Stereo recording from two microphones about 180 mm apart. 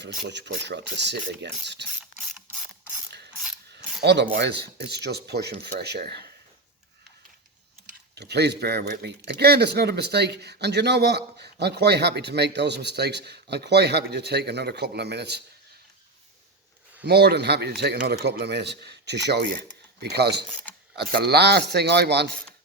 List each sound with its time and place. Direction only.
0.1 s speech: 65° right (ahead or behind)
4.0 s speech: 70° right (ahead or behind)
8.1 s speech: 65° right (ahead or behind)
17.0 s speech: 65° right (ahead or behind)